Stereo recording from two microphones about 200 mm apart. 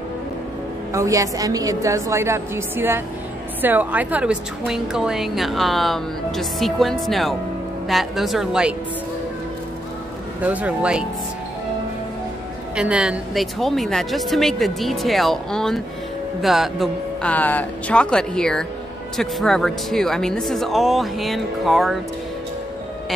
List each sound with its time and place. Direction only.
0.9 s a woman's voice: 15° right (ahead or behind)
10.4 s a woman's voice: 5° right (ahead or behind)
12.7 s a woman's voice: 5° right (ahead or behind)